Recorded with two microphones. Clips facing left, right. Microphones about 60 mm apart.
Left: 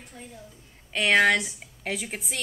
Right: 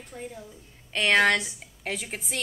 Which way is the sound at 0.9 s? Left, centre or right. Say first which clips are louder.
Left 1 dB; centre.